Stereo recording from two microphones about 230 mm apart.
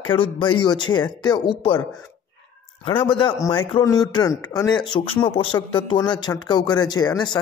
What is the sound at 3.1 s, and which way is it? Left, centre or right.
Speech, left.